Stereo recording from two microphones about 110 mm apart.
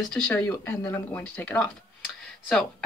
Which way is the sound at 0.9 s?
20° left (ahead or behind).